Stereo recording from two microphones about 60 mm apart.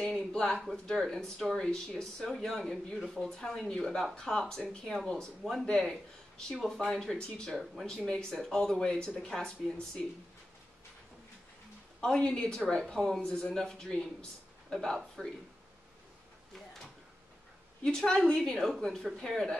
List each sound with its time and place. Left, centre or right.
0.1 s a sound: centre
0.8 s speech: centre
12.0 s speech: centre
17.8 s speech: centre